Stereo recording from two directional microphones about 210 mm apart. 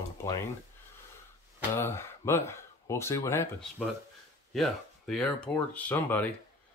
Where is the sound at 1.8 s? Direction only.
10° left (ahead or behind).